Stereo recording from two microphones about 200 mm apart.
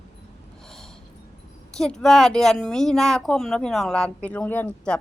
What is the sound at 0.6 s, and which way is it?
Gasp, centre (ahead or behind).